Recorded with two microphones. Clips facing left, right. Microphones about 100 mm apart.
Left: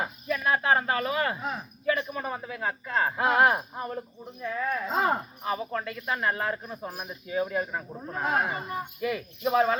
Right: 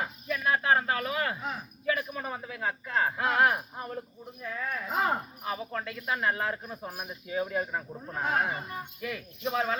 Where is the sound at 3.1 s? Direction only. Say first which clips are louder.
Left 4 dB; 20° left (ahead or behind).